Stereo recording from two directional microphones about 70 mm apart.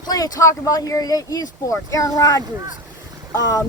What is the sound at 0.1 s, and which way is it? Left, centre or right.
Speech, left.